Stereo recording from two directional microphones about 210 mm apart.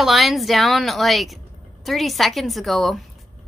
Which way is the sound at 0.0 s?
Centre (ahead or behind).